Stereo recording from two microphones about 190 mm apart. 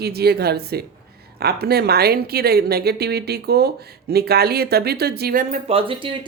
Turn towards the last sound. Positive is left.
turn(degrees=-25)  # may be behind; listen again after turning